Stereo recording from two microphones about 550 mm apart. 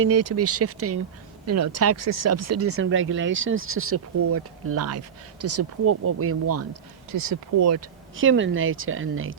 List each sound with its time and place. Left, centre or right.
0.0 s speech: right